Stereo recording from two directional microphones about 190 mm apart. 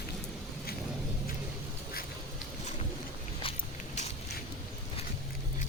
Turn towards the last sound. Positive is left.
turn(degrees=35)  # may be behind; listen again after turning